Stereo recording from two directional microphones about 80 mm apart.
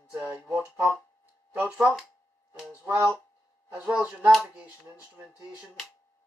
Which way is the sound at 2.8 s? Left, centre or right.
Right.